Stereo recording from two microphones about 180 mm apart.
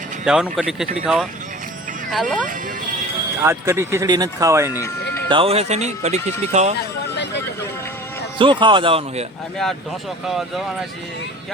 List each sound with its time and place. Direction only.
0.3 s speech: 5° right (ahead or behind)
3.4 s speech: 15° right (ahead or behind)
5.3 s speech: 30° right (ahead or behind)
8.4 s speech: 25° right (ahead or behind)
10.2 s speech: centre (ahead or behind)